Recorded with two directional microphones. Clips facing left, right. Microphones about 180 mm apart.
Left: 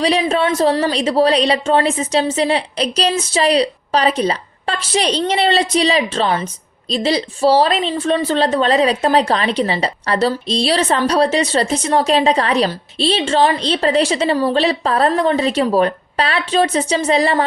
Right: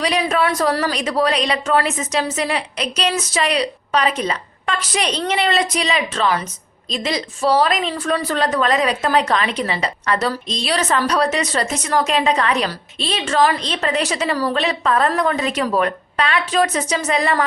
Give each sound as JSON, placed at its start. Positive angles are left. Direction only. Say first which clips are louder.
{"t": 0.0, "sound": "a woman's voice", "louder": "left 3 dB", "side_deg": 30}